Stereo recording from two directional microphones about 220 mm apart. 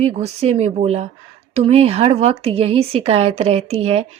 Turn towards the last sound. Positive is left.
turn(degrees=-30)  # may be behind; listen again after turning